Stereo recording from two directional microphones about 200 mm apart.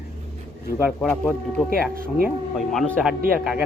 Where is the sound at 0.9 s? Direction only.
5° left (ahead or behind).